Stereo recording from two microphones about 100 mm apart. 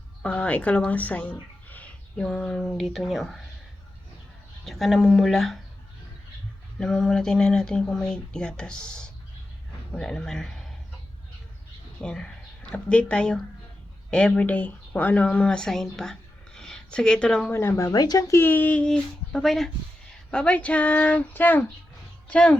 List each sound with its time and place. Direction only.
0.2 s speech: 10° left (ahead or behind)
4.6 s speech: centre (ahead or behind)
6.7 s speech: 5° left (ahead or behind)
12.0 s speech: 10° left (ahead or behind)
16.6 s a sound: 5° left (ahead or behind)
17.5 s speech: 25° left (ahead or behind)